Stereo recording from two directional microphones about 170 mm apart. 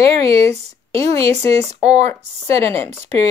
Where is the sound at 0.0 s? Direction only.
35° right (ahead or behind).